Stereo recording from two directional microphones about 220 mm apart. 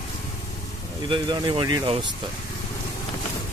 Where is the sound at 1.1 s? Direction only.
20° right (ahead or behind).